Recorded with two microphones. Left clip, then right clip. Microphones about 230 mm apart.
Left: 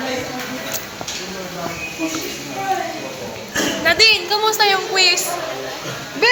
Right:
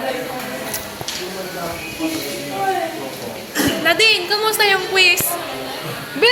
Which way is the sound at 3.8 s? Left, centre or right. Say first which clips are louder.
Left 1 dB; centre.